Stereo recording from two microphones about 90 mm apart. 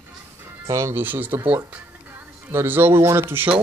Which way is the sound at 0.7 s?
30° right (ahead or behind).